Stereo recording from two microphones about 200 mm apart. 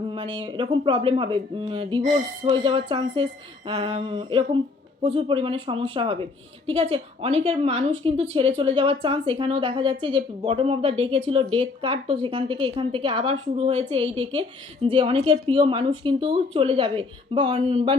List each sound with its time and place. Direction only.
0.1 s a woman's voice: 30° right (ahead or behind)